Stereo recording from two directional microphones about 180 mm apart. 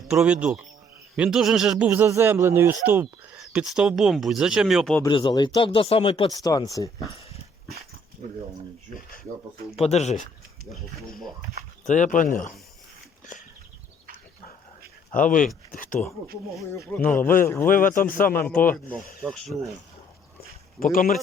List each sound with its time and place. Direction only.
0.1 s a man's voice: 5° right (ahead or behind)
5.0 s speech: 25° left (ahead or behind)
6.3 s speech: 20° left (ahead or behind)
8.2 s speech: 45° right (ahead or behind)
9.7 s speech: 35° left (ahead or behind)
11.9 s a man's voice: 45° left (ahead or behind)
15.1 s a man's voice: 50° left (ahead or behind)
17.1 s speech: 10° left (ahead or behind)
17.7 s a man's voice: 50° left (ahead or behind)
18.7 s speech: 10° left (ahead or behind)
20.7 s a man's voice: 50° left (ahead or behind)